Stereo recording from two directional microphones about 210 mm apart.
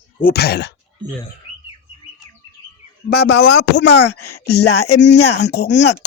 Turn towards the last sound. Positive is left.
turn(degrees=55)  # may be behind; listen again after turning